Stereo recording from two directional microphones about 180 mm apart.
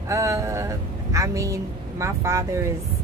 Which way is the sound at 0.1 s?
15° right (ahead or behind).